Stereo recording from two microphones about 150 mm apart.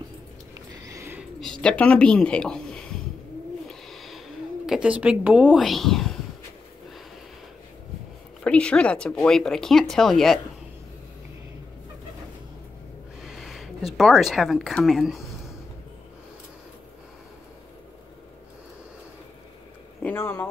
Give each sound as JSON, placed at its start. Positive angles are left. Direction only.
{"t": 0.8, "sound": "bird", "side_deg": -20}
{"t": 1.4, "sound": "speech", "side_deg": 5}
{"t": 3.6, "sound": "owl", "side_deg": 0}
{"t": 4.6, "sound": "speech", "side_deg": -5}
{"t": 8.5, "sound": "speech", "side_deg": 5}
{"t": 13.2, "sound": "speech", "side_deg": 0}
{"t": 20.0, "sound": "a sound", "side_deg": 15}